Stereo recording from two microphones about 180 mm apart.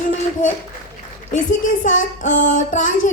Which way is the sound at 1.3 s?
45° left (ahead or behind).